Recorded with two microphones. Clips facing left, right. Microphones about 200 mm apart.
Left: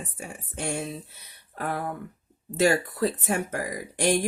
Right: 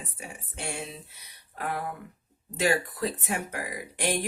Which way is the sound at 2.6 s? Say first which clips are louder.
Left 4 dB; 45° left (ahead or behind).